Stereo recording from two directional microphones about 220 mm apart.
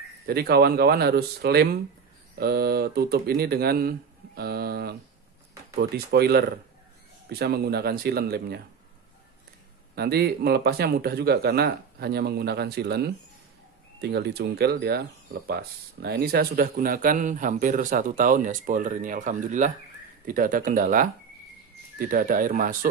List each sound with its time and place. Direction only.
0.3 s a man's voice: 45° right (ahead or behind)
9.9 s a man's voice: 45° right (ahead or behind)